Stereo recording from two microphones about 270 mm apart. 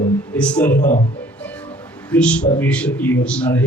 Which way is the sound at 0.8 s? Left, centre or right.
Left.